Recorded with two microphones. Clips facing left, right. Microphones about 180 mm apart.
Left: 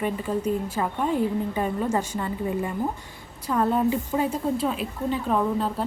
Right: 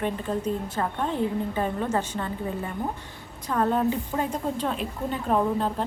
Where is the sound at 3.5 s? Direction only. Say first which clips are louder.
Left 1 dB; 10° left (ahead or behind).